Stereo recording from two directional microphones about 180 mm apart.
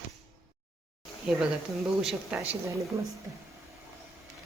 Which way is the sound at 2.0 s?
5° right (ahead or behind).